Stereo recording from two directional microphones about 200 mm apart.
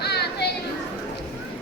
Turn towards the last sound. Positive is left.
turn(degrees=55)  # may be behind; listen again after turning